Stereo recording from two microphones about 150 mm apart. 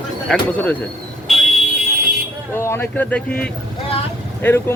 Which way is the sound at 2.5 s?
15° left (ahead or behind).